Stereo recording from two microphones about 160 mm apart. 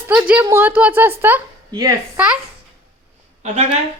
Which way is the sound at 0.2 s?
15° right (ahead or behind).